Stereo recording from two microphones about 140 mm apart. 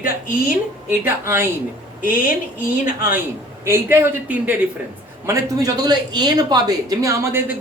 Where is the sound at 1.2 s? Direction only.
20° right (ahead or behind).